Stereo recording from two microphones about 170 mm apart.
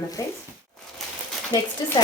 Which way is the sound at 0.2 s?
20° left (ahead or behind).